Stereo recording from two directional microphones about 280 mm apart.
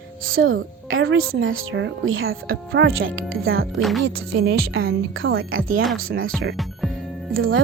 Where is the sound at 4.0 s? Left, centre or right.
Right.